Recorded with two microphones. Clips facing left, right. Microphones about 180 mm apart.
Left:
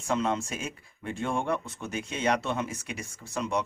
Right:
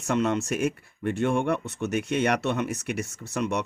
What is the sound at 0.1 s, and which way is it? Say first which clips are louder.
Speech: right 4 dB; 70° right (ahead or behind).